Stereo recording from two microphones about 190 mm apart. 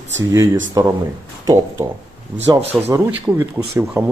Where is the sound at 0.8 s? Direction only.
20° right (ahead or behind).